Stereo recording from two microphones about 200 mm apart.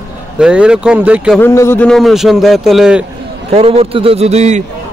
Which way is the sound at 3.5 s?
30° right (ahead or behind).